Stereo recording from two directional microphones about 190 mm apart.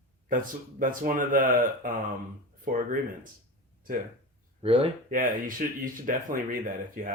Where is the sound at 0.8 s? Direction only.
45° right (ahead or behind).